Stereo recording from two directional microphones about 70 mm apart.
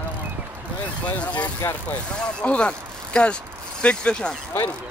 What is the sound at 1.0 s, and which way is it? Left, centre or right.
Speech, centre.